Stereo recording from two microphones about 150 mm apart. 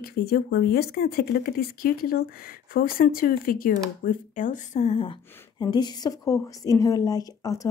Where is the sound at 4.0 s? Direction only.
60° left (ahead or behind).